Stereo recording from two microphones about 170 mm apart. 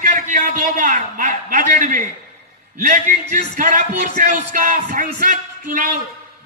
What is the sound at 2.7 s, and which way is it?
A man's voice, 50° right (ahead or behind).